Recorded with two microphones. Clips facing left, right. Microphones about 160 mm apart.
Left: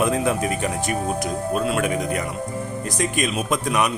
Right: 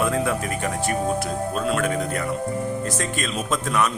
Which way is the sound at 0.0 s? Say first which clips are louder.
Left 2 dB; 20° left (ahead or behind).